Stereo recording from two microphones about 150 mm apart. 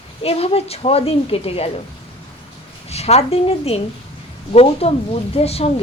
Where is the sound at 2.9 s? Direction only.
45° left (ahead or behind).